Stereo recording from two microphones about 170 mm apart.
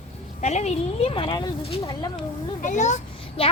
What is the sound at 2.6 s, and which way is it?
Speech, 45° left (ahead or behind).